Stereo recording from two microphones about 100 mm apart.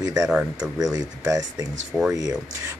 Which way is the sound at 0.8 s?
35° right (ahead or behind).